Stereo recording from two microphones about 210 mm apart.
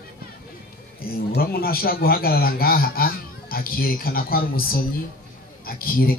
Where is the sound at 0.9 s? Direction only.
45° left (ahead or behind).